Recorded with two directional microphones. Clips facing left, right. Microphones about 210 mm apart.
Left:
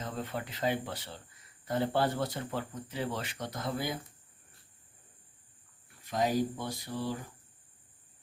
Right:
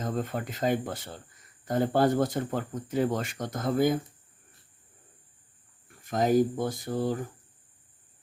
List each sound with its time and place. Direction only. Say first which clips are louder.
0.0 s speech: right 6 dB; 45° right (ahead or behind)
6.0 s speech: right 6 dB; 50° right (ahead or behind)